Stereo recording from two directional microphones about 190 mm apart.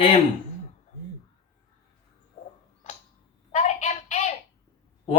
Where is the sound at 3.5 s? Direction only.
35° left (ahead or behind).